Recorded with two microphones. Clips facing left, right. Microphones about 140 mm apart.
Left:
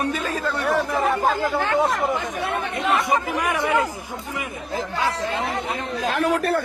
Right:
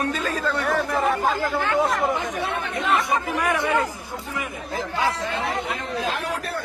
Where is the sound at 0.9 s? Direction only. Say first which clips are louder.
Left 1 dB; centre (ahead or behind).